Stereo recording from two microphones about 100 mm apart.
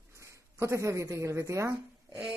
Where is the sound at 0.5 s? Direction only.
30° right (ahead or behind).